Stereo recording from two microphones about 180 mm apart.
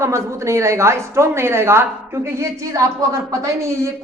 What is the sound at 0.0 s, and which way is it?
A woman's voice, 15° right (ahead or behind).